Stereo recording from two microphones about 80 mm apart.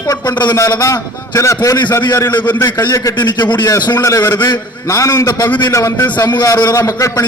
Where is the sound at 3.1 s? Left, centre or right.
Left.